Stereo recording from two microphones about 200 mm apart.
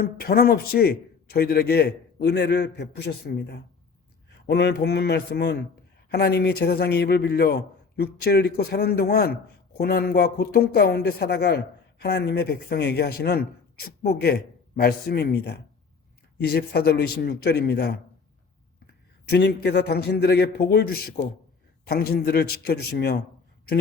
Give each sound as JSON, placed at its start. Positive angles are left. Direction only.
{"t": 0.0, "sound": "a woman's voice", "side_deg": 50}
{"t": 19.3, "sound": "a woman's voice", "side_deg": 55}